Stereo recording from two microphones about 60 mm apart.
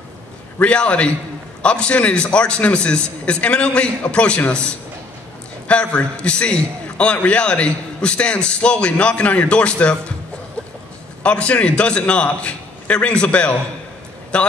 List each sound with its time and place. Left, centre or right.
0.6 s a man's voice: left
5.7 s a man's voice: centre
11.2 s a man's voice: centre